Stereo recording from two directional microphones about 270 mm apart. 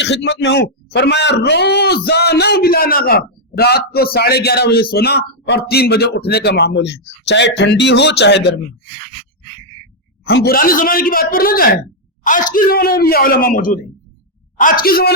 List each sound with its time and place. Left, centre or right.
0.0 s a man's voice: left
10.2 s a man's voice: left